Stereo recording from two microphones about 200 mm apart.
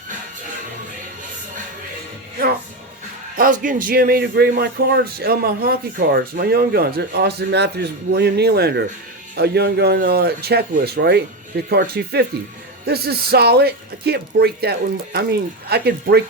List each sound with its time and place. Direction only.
3.3 s speech: 45° right (ahead or behind)